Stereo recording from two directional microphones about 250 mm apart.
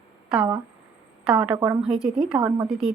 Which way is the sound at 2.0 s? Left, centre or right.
Centre.